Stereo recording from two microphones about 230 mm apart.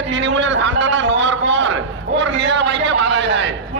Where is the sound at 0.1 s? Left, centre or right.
Right.